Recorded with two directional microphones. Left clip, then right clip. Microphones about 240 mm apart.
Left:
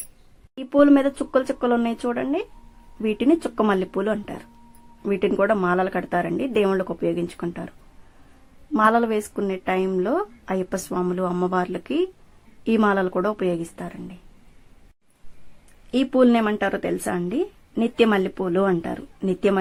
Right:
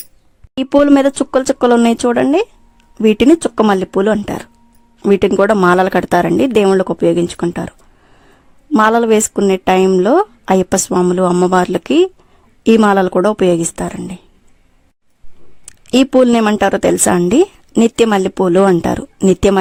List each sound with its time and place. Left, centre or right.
0.5 s speech: right
8.7 s speech: right
15.9 s speech: right